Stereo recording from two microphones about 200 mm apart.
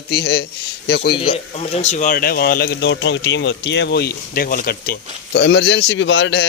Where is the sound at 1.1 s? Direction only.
25° left (ahead or behind).